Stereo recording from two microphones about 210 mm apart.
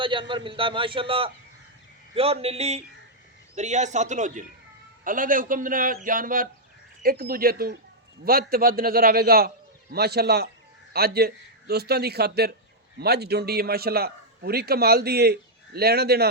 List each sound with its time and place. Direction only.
0.0 s a man's voice: 25° right (ahead or behind); by 16.2 s 50° right (ahead or behind)